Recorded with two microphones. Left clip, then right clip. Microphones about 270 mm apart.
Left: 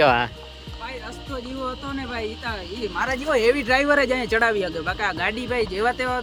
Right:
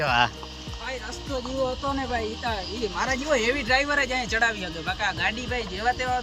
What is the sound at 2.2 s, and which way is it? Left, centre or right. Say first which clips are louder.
Speech: even; centre.